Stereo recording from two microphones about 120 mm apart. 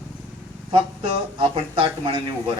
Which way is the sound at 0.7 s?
45° right (ahead or behind).